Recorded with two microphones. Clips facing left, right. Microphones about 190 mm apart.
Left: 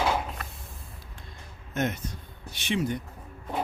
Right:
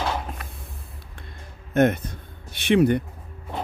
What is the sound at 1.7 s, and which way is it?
A man's voice, 55° right (ahead or behind).